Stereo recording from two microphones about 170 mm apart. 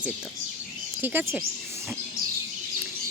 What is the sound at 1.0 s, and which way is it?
Speech, 10° right (ahead or behind).